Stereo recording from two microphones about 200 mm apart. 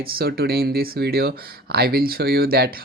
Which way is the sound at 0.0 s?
50° right (ahead or behind).